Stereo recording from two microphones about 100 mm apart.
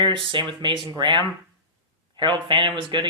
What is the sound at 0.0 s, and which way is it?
Speech, 55° right (ahead or behind).